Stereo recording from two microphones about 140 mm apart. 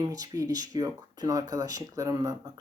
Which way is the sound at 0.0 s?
25° right (ahead or behind).